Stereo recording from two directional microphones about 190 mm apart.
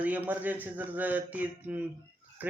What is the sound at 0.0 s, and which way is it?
Speech, 10° right (ahead or behind).